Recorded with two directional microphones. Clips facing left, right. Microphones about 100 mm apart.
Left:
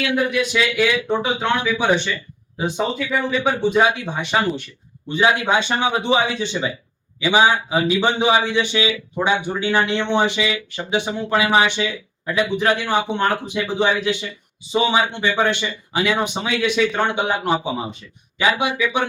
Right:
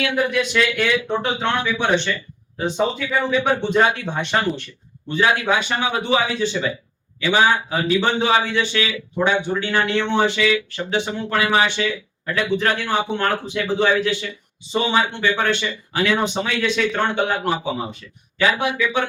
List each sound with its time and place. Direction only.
0.3 s speech: 5° left (ahead or behind)
5.1 s speech: 20° left (ahead or behind)